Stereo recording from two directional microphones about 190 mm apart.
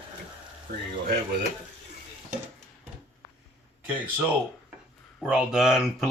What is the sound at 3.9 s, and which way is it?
Speech, 10° right (ahead or behind).